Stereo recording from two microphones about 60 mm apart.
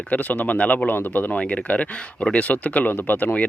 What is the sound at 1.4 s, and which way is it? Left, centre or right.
Speech, left.